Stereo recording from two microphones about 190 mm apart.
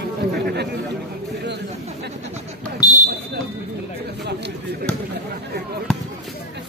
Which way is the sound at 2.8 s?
20° left (ahead or behind).